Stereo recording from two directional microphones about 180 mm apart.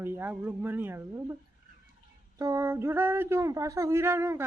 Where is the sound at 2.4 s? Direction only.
15° right (ahead or behind).